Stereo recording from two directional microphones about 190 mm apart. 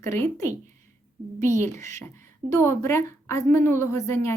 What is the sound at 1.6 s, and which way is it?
A woman's voice, 15° left (ahead or behind).